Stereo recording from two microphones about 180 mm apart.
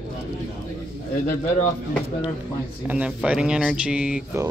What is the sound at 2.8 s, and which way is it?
Speech, 5° right (ahead or behind).